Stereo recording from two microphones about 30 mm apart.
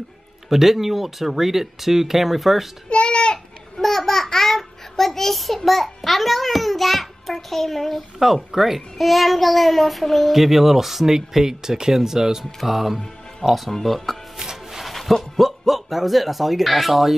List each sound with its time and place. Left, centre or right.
0.5 s speech: centre
2.9 s a sound: left
3.7 s babbling: centre
5.7 s a child's voice: centre
8.2 s a child's voice: centre
10.3 s speech: centre
12.6 s speech: centre
13.7 s speech: centre
14.4 s music: centre
14.9 s speech: centre